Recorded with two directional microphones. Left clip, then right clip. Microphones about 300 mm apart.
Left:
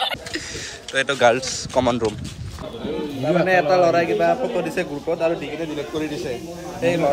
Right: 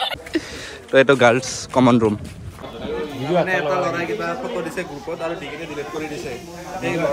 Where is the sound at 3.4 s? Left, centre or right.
Centre.